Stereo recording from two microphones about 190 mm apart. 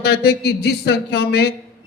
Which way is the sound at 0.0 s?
60° left (ahead or behind).